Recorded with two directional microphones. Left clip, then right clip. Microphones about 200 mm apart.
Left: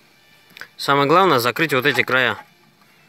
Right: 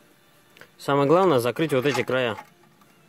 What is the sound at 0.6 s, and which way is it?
Speech, centre (ahead or behind).